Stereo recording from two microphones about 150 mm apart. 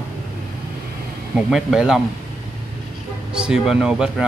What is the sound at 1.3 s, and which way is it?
Speech, 5° right (ahead or behind).